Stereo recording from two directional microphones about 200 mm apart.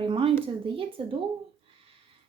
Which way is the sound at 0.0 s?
25° right (ahead or behind).